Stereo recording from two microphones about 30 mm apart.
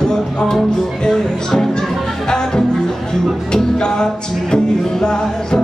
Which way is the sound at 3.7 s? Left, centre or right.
Left.